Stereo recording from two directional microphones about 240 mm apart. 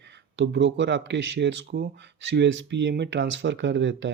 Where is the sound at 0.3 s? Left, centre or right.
Right.